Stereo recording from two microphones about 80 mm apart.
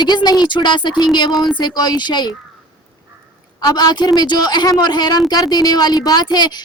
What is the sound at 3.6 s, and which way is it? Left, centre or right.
A woman's voice, left.